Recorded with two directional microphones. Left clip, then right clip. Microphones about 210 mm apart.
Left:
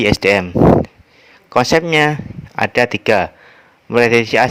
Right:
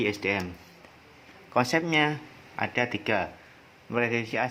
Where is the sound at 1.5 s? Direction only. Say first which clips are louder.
Left 12 dB; 45° left (ahead or behind).